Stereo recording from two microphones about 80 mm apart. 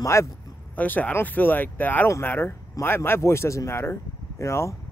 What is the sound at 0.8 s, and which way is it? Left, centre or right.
Speech, centre.